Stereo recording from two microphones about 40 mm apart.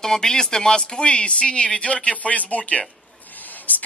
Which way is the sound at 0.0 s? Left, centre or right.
Centre.